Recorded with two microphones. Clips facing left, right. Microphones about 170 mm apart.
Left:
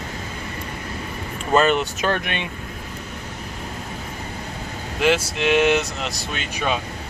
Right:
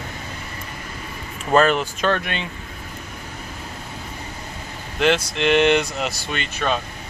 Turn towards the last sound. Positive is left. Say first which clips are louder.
# right 1 dB
turn(degrees=5)  # may be behind; listen again after turning